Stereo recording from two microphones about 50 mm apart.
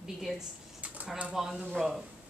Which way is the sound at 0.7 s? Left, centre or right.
Right.